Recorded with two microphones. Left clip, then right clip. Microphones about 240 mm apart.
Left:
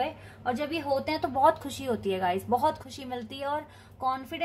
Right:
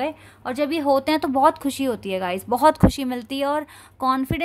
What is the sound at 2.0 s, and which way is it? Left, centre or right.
Speech, right.